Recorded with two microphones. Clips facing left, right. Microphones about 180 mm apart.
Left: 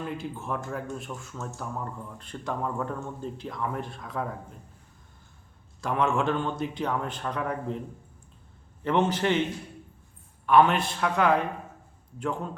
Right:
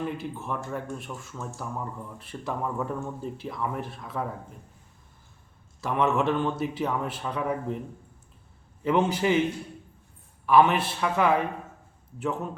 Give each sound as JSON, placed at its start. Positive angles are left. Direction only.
{"t": 0.0, "sound": "speech", "side_deg": 0}
{"t": 5.8, "sound": "speech", "side_deg": -5}
{"t": 8.8, "sound": "a man's voice", "side_deg": -10}
{"t": 10.4, "sound": "speech", "side_deg": -5}